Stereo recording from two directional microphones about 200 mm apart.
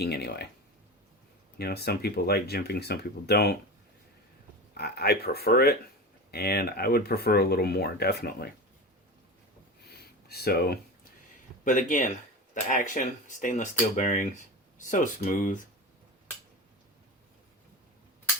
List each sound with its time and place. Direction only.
0.0 s speech: 55° left (ahead or behind)
1.5 s speech: 55° left (ahead or behind)
4.7 s speech: 50° left (ahead or behind)
9.8 s a sound: 50° left (ahead or behind)
11.6 s speech: 40° left (ahead or behind)